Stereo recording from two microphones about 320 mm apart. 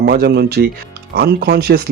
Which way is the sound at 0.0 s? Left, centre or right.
Right.